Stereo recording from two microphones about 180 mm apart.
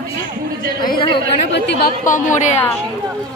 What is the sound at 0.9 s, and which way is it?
Speech, 30° left (ahead or behind).